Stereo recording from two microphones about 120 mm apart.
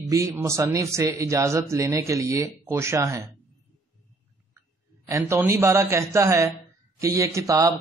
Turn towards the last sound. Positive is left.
turn(degrees=-25)  # may be behind; listen again after turning